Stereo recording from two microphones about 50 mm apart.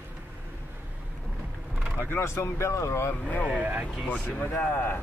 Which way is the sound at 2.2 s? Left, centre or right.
Left.